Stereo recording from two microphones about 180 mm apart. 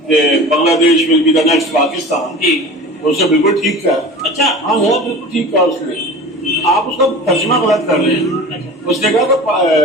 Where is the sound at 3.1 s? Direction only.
Centre (ahead or behind).